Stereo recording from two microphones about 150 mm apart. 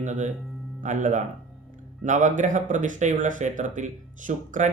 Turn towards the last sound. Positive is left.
turn(degrees=-60)  # may be behind; listen again after turning